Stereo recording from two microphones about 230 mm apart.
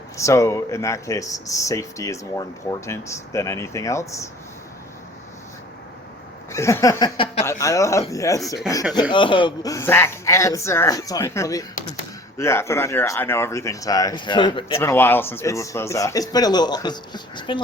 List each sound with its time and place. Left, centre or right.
0.2 s speech: centre
6.5 s speech: centre
14.8 s speech: centre